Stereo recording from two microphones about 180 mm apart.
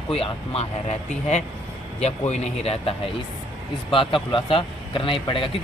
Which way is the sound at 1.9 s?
35° left (ahead or behind).